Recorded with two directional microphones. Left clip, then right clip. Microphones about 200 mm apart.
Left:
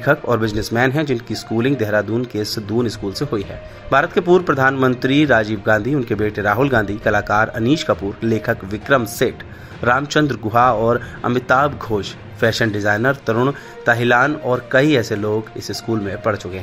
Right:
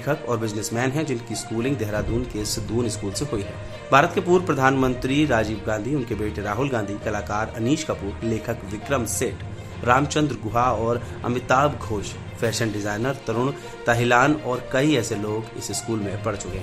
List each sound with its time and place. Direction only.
0.0 s speech: 20° left (ahead or behind)